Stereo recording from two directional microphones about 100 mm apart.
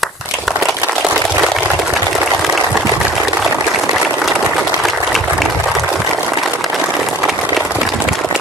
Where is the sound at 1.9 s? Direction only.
Centre (ahead or behind).